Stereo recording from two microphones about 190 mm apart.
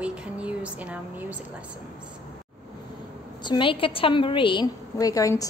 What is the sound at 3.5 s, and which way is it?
A woman's voice, 25° left (ahead or behind).